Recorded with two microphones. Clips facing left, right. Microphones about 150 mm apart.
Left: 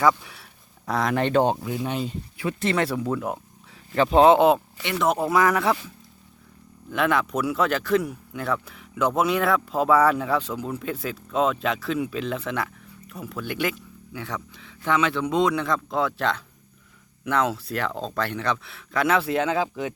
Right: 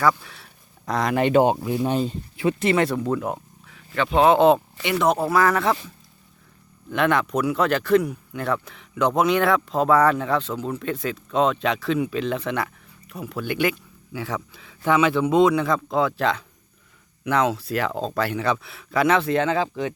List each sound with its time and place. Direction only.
0.0 s speech: 15° left (ahead or behind); by 1.5 s 10° right (ahead or behind)
1.6 s speech: 25° right (ahead or behind)
2.6 s speech: 10° right (ahead or behind)
2.8 s speech: centre (ahead or behind)
3.7 s a sound: 35° left (ahead or behind)
4.4 s speech: 5° left (ahead or behind)
5.1 s speech: 15° left (ahead or behind)
6.9 s speech: 5° left (ahead or behind)